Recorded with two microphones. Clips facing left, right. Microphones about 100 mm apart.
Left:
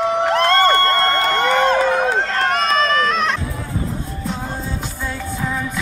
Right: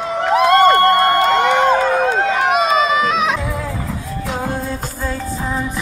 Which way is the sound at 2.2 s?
5° right (ahead or behind).